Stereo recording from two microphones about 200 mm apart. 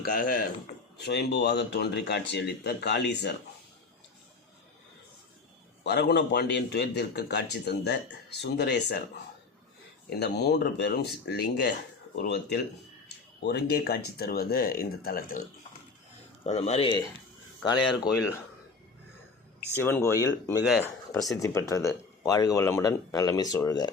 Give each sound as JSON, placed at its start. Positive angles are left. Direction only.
{"t": 0.0, "sound": "speech", "side_deg": 45}
{"t": 0.9, "sound": "speech", "side_deg": 55}
{"t": 5.8, "sound": "speech", "side_deg": 55}
{"t": 10.1, "sound": "speech", "side_deg": 55}
{"t": 16.5, "sound": "speech", "side_deg": 35}
{"t": 19.7, "sound": "speech", "side_deg": 10}